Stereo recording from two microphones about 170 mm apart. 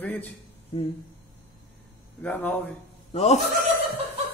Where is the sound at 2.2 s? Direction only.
10° left (ahead or behind).